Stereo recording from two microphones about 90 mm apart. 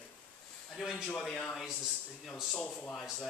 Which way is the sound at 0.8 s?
Centre (ahead or behind).